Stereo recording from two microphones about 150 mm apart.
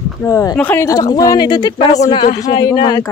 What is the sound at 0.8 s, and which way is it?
Speech, 25° left (ahead or behind).